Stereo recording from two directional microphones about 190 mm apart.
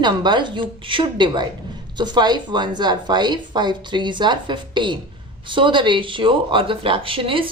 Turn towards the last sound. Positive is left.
turn(degrees=-25)  # may be behind; listen again after turning